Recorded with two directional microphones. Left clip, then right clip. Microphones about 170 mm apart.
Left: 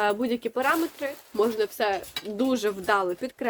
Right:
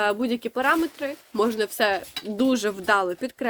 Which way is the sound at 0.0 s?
30° right (ahead or behind).